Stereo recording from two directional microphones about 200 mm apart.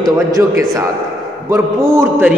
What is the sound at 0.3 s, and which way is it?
A man's voice, 15° right (ahead or behind).